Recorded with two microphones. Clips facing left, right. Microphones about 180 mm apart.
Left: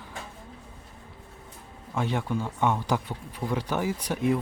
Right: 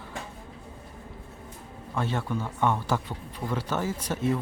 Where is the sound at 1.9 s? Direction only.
15° left (ahead or behind).